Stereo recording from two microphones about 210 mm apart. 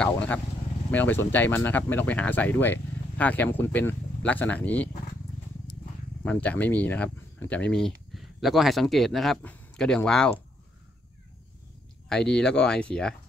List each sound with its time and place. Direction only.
0.0 s vehicle: 5° left (ahead or behind)
0.9 s speech: 10° left (ahead or behind)
6.2 s speech: 5° left (ahead or behind)
12.1 s speech: 5° left (ahead or behind)